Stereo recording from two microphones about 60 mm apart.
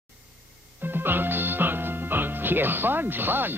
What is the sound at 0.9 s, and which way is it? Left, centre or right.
Speech, right.